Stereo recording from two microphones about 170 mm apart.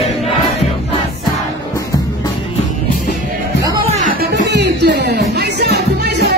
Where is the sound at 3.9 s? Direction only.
55° right (ahead or behind).